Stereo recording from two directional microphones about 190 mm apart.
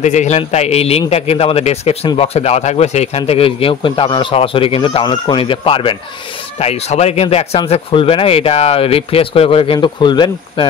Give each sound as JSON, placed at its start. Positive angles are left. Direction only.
{"t": 0.0, "sound": "a man's voice", "side_deg": 40}